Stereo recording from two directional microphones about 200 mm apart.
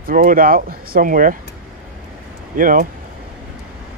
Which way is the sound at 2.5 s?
45° right (ahead or behind).